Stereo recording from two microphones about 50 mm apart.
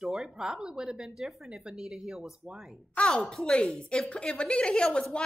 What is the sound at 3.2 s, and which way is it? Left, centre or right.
A woman's voice, centre.